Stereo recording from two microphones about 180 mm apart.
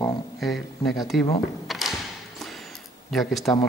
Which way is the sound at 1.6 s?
Centre (ahead or behind).